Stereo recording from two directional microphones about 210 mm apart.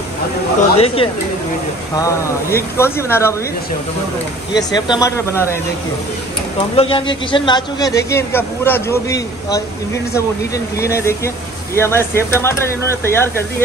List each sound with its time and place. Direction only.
0.7 s speech: 30° left (ahead or behind)
2.0 s a man's voice: 15° left (ahead or behind)
4.6 s a man's voice: 20° left (ahead or behind)
6.8 s a man's voice: 25° left (ahead or behind)
10.8 s a man's voice: 15° left (ahead or behind)